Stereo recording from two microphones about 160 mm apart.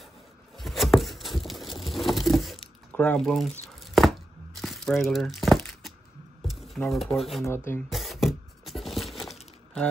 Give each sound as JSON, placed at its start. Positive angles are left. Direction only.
{"t": 0.6, "sound": "patter", "side_deg": 0}
{"t": 2.9, "sound": "tearing", "side_deg": 10}
{"t": 5.0, "sound": "crumpling", "side_deg": 0}
{"t": 6.4, "sound": "a sound", "side_deg": 0}
{"t": 7.2, "sound": "speech", "side_deg": 0}
{"t": 7.4, "sound": "speech", "side_deg": 15}
{"t": 7.9, "sound": "a sound", "side_deg": 0}